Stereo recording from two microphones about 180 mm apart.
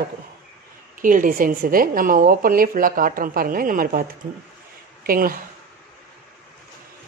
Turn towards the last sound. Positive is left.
turn(degrees=-55)  # may be behind; listen again after turning